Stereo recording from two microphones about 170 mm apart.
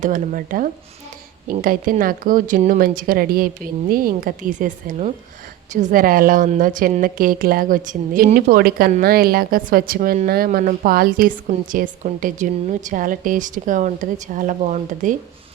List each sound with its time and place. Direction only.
0.0 s a woman's voice: 50° right (ahead or behind)